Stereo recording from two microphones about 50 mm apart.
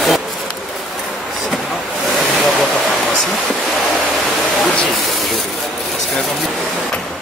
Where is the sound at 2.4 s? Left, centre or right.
Centre.